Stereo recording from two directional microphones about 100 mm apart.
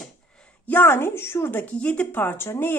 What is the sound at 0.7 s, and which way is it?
A woman's voice, 25° left (ahead or behind).